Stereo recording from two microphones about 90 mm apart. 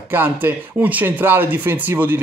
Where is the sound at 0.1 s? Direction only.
20° right (ahead or behind).